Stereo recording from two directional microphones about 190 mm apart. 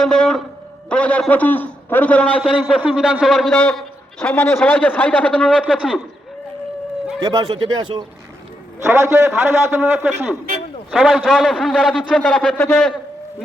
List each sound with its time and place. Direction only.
0.0 s a man's voice: 5° left (ahead or behind)
2.4 s a man's voice: 5° right (ahead or behind)
7.2 s speech: 20° right (ahead or behind)
8.8 s a man's voice: 15° right (ahead or behind); by 12.8 s 10° left (ahead or behind)